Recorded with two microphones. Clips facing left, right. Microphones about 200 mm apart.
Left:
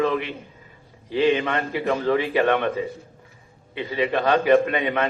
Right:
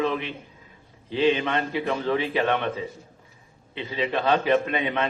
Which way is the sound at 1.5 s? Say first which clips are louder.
Left 2 dB; 50° left (ahead or behind).